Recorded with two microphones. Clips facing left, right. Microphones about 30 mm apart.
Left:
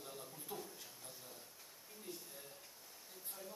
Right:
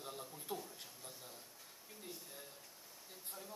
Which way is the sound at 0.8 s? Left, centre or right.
Centre.